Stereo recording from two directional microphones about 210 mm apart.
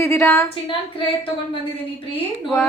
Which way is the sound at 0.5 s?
25° left (ahead or behind).